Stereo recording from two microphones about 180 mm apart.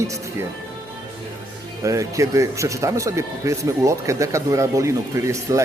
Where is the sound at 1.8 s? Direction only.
15° right (ahead or behind).